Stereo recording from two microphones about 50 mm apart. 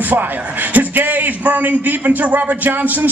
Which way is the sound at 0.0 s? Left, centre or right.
Right.